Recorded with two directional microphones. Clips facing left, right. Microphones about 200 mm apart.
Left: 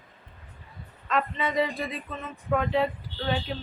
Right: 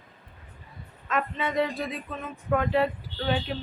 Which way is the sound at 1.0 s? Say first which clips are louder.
Left 1 dB; centre (ahead or behind).